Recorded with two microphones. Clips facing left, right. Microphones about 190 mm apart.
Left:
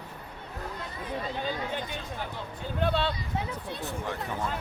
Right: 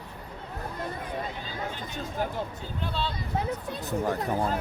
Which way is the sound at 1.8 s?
45° right (ahead or behind).